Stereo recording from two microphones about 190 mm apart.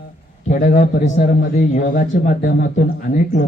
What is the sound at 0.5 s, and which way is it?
A man's voice, 40° left (ahead or behind).